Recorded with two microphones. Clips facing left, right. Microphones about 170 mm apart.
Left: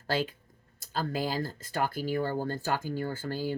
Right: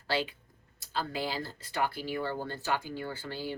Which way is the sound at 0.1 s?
45° left (ahead or behind).